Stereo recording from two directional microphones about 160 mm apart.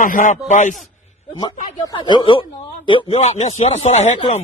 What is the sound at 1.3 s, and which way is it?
A man's voice, 25° left (ahead or behind).